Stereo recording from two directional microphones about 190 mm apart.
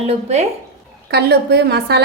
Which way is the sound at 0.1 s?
35° right (ahead or behind).